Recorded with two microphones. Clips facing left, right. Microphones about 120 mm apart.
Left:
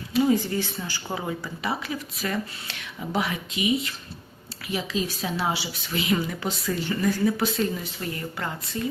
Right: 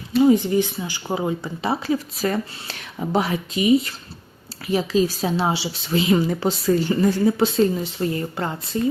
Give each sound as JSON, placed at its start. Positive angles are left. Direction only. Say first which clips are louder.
{"t": 0.2, "sound": "a woman's voice", "louder": "right 6 dB", "side_deg": -20}